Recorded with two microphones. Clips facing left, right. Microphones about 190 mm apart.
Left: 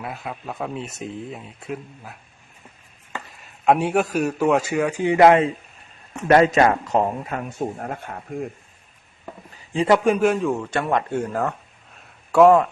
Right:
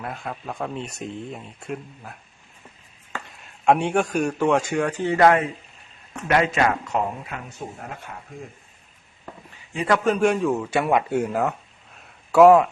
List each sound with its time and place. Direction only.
0.0 s a man's voice: 5° left (ahead or behind)
3.2 s a man's voice: centre (ahead or behind); by 5.5 s 20° left (ahead or behind)
6.2 s speech: 40° left (ahead or behind)
10.0 s a man's voice: 10° left (ahead or behind)
10.2 s a man's voice: centre (ahead or behind)
11.9 s a sound: centre (ahead or behind)